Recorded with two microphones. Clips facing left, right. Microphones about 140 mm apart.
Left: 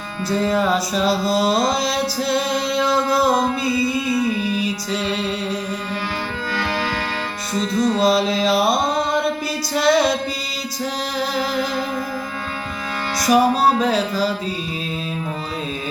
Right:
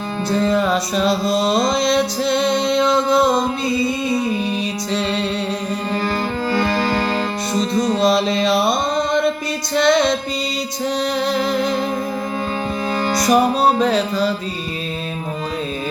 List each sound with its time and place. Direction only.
0.5 s music: centre (ahead or behind)
3.7 s music: 20° right (ahead or behind)
6.5 s music: 40° right (ahead or behind)
8.0 s music: centre (ahead or behind)
13.1 s music: centre (ahead or behind)